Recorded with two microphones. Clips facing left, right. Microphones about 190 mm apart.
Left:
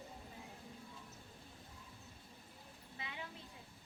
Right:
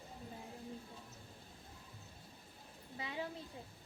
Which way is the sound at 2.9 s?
30° right (ahead or behind).